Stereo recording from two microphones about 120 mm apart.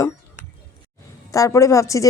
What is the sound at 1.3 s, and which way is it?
Speech, 25° left (ahead or behind).